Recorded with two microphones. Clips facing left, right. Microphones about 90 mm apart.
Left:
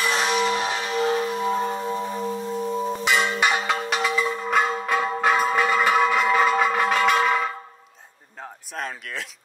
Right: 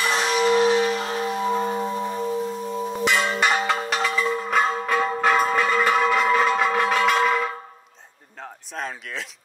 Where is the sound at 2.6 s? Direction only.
35° left (ahead or behind).